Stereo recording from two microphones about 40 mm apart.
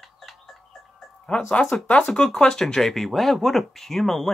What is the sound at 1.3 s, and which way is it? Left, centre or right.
Speech, left.